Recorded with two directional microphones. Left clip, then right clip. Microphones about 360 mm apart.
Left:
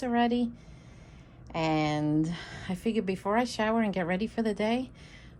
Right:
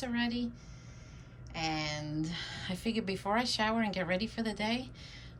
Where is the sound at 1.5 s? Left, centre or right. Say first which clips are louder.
Left 7 dB; centre.